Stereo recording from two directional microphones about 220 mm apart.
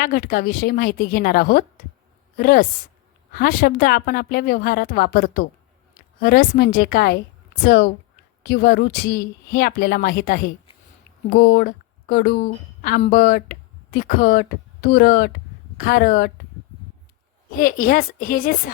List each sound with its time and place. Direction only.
0.0 s a woman's voice: 40° left (ahead or behind)
17.6 s a woman's voice: 40° left (ahead or behind)